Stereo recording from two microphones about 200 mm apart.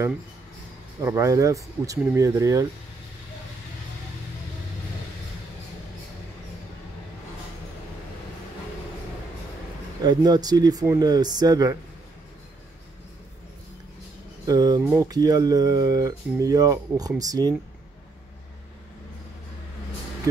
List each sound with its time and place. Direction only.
1.0 s speech: 15° right (ahead or behind)
10.0 s speech: 20° right (ahead or behind)
14.4 s speech: 20° right (ahead or behind)